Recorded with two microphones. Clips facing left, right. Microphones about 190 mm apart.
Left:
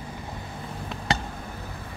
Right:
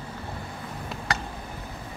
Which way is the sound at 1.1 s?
25° left (ahead or behind).